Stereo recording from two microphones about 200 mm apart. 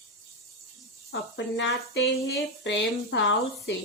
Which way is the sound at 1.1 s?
65° left (ahead or behind).